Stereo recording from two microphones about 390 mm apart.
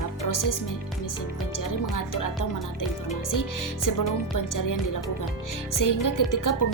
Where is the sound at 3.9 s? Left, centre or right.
Left.